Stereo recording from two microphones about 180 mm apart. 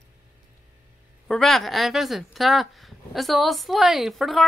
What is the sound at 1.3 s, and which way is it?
A woman's voice, centre (ahead or behind).